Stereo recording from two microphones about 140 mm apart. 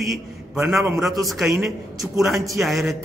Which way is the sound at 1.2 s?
Centre (ahead or behind).